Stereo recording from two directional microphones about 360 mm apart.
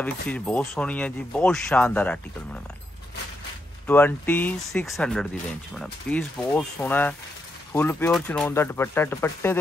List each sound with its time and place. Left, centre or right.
0.0 s speech: centre
3.8 s speech: centre